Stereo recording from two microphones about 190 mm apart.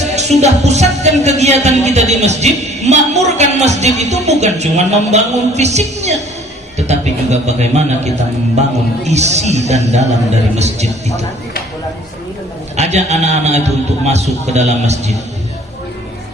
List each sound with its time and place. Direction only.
0.2 s speech: 35° right (ahead or behind)
12.7 s speech: 35° right (ahead or behind)